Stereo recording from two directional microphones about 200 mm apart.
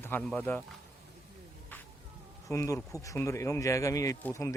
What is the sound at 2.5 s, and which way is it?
Speech, 15° left (ahead or behind).